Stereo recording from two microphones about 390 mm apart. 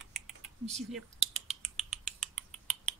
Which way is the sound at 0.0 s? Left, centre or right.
Centre.